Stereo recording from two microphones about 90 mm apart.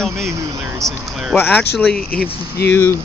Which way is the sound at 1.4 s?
20° left (ahead or behind).